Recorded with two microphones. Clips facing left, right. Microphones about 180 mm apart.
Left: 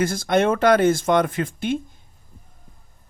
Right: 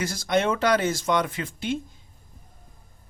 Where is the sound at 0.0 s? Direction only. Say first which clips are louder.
Left 5 dB; 55° left (ahead or behind).